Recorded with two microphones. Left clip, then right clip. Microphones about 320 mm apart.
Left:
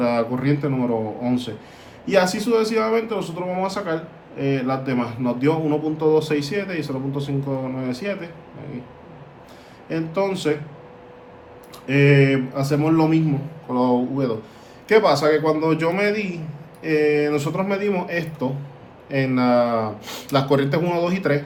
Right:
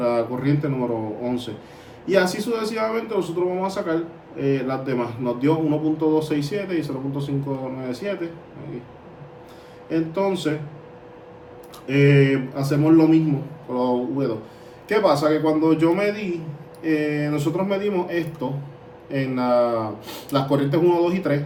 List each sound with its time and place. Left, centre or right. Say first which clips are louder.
0.0 s a sound: left 1 dB; left
1.2 s a man's voice: left 2 dB; left
9.9 s a man's voice: even; left
11.9 s a man's voice: left 1 dB; left